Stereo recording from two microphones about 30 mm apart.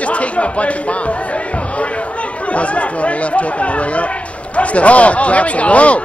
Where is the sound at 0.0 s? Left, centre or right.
Left.